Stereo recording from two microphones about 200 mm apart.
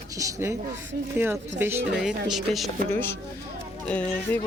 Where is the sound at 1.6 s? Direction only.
10° right (ahead or behind).